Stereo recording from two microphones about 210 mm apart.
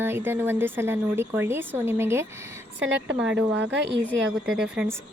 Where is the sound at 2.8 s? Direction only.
65° right (ahead or behind).